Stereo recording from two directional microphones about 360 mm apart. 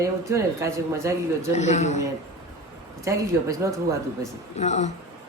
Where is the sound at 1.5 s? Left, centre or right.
Centre.